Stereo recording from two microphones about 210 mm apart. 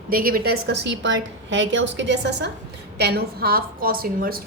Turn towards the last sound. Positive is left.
turn(degrees=-45)  # may be behind; listen again after turning